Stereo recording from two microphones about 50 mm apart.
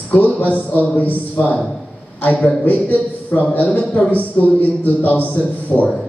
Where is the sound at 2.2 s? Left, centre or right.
Left.